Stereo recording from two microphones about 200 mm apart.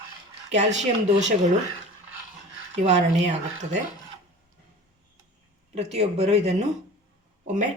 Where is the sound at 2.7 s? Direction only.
35° right (ahead or behind).